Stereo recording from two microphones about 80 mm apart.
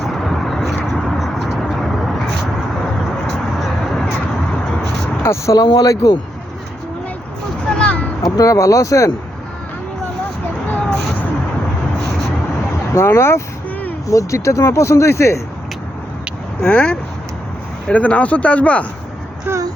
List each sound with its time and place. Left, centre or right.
0.0 s vehicle: centre
5.2 s speech: left
5.5 s speech: left
5.9 s speech: left
7.7 s a sound: centre
8.2 s speech: left
12.9 s speech: left
16.6 s speech: centre
19.5 s a sound: right